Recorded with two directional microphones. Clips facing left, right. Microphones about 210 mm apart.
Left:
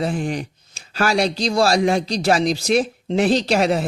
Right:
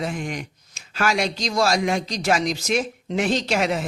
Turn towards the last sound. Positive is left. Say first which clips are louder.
# left 4 dB
turn(degrees=35)  # may be behind; listen again after turning